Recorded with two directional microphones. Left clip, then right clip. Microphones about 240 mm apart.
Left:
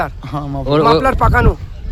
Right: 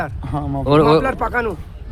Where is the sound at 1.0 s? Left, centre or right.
Left.